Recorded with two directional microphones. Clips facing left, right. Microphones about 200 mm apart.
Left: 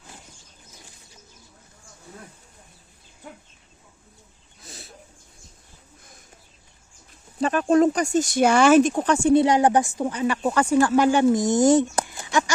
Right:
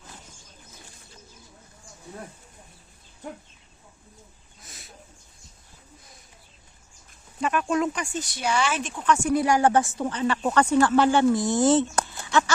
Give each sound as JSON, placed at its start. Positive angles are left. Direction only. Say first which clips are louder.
{"t": 4.6, "sound": "a sound", "louder": "left 6 dB", "side_deg": 30}
{"t": 7.3, "sound": "speech", "louder": "left 6 dB", "side_deg": 35}
{"t": 9.1, "sound": "speech", "louder": "left 6 dB", "side_deg": 25}